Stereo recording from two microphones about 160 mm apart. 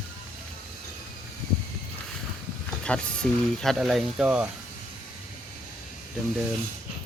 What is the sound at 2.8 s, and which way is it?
Speech, 5° left (ahead or behind).